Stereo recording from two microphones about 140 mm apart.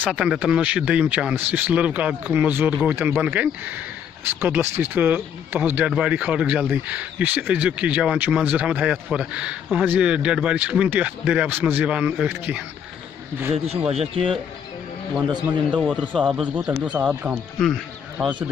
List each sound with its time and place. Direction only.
0.1 s speech: 5° right (ahead or behind)
13.8 s speech: 45° right (ahead or behind)
15.3 s a man's voice: 5° right (ahead or behind)
16.9 s speech: 10° right (ahead or behind)